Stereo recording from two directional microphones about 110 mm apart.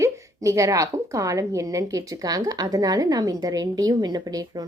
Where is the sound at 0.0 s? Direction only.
30° right (ahead or behind).